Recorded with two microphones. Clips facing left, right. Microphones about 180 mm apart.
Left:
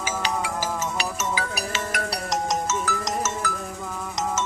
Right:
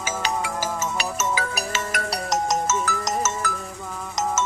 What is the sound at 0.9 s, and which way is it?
Music, 45° right (ahead or behind).